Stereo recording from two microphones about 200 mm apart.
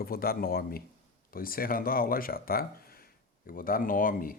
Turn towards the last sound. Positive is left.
turn(degrees=45)  # may be behind; listen again after turning